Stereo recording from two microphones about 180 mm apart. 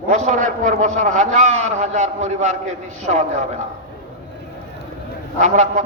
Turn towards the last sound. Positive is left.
turn(degrees=-40)  # may be behind; listen again after turning